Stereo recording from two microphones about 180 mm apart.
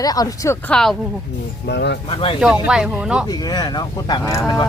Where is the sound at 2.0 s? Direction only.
30° left (ahead or behind).